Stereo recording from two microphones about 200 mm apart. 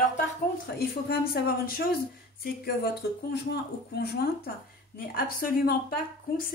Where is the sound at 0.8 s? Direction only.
50° left (ahead or behind).